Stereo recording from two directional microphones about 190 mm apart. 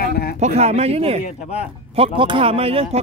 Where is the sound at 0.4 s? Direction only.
35° right (ahead or behind).